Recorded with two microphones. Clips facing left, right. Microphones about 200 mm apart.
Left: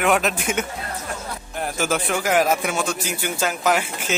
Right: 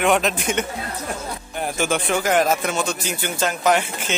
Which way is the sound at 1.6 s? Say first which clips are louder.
Right 1 dB; 5° left (ahead or behind).